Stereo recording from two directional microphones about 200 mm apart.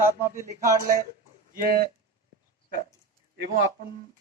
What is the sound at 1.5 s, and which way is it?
Speech, 45° right (ahead or behind).